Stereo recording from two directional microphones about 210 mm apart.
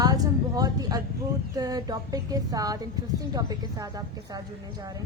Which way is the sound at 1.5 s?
15° right (ahead or behind).